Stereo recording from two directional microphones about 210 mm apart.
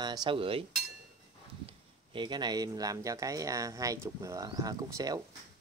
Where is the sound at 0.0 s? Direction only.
20° right (ahead or behind).